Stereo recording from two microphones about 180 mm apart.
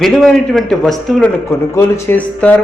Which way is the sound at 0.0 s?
Centre (ahead or behind).